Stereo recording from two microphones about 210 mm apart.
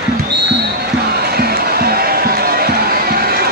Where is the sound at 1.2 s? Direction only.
50° right (ahead or behind).